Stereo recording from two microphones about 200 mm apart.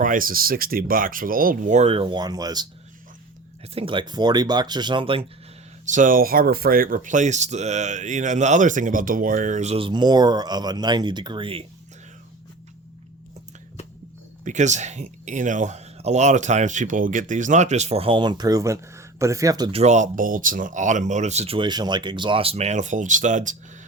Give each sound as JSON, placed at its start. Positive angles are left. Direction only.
{"t": 0.0, "sound": "speech", "side_deg": -45}
{"t": 3.8, "sound": "speech", "side_deg": -25}
{"t": 5.8, "sound": "speech", "side_deg": -40}
{"t": 14.4, "sound": "speech", "side_deg": -35}
{"t": 19.8, "sound": "speech", "side_deg": -35}